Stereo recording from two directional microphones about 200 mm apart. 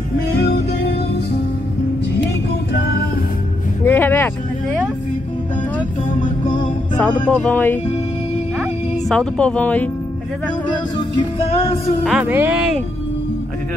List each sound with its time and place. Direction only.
0.4 s music: 55° left (ahead or behind)
3.8 s music: 10° left (ahead or behind)
7.2 s speech: 10° left (ahead or behind)
9.1 s speech: 5° left (ahead or behind)
11.1 s music: 30° left (ahead or behind)
12.0 s speech: 5° right (ahead or behind)